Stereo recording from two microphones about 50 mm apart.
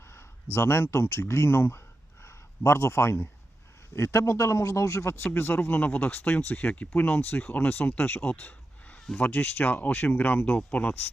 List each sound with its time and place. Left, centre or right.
0.1 s speech: left
3.9 s a man's voice: left
6.7 s speech: left
7.2 s speech: left